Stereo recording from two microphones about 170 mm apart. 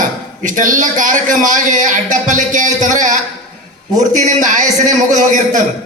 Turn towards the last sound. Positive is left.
turn(degrees=-45)  # may be behind; listen again after turning